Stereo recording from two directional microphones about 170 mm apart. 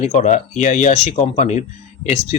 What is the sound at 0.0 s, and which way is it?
Speech, 45° left (ahead or behind).